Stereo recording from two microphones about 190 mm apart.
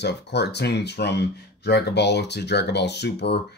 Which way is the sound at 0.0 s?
60° left (ahead or behind).